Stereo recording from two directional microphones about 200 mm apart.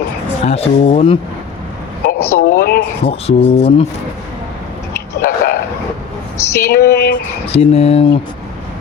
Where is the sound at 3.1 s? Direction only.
30° left (ahead or behind).